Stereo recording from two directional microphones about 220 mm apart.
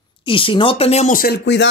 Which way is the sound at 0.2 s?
25° left (ahead or behind).